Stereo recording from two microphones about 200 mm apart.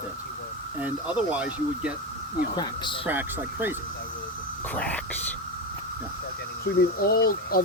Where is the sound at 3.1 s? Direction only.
10° right (ahead or behind).